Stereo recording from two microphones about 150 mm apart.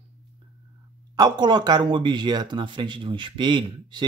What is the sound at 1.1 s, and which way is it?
Speech, 30° right (ahead or behind).